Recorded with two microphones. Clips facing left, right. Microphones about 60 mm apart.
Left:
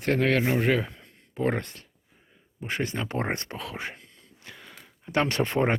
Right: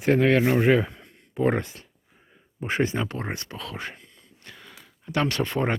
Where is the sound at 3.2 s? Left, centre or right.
Left.